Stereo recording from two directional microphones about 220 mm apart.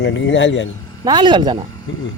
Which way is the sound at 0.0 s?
55° left (ahead or behind).